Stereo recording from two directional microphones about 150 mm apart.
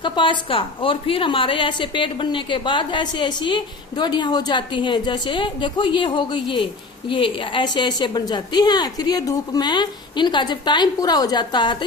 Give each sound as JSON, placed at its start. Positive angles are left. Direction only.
{"t": 0.0, "sound": "a woman's voice", "side_deg": 35}